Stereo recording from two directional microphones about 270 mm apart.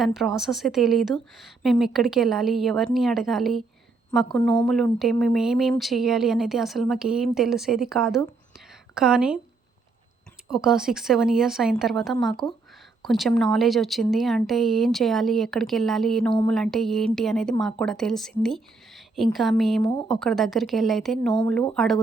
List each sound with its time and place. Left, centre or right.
0.0 s speech: centre
8.5 s a sound: centre
10.5 s speech: centre